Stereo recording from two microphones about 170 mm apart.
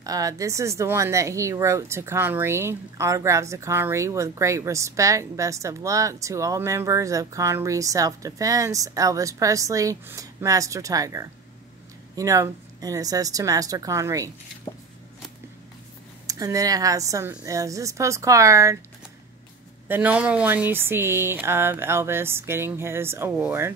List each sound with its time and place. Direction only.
0.0 s a woman's voice: 20° right (ahead or behind)
16.3 s a woman's voice: 20° right (ahead or behind)
19.9 s speech: 10° right (ahead or behind)